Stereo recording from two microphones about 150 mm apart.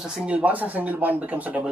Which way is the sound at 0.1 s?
10° right (ahead or behind).